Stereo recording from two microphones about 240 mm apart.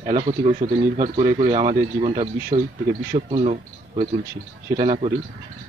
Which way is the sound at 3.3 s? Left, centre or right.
Right.